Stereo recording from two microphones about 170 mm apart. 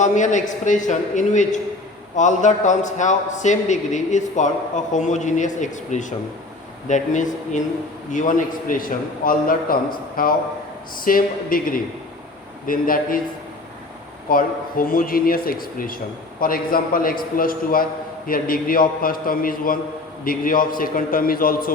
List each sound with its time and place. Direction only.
0.0 s a man's voice: 45° left (ahead or behind)
14.3 s a man's voice: 55° left (ahead or behind)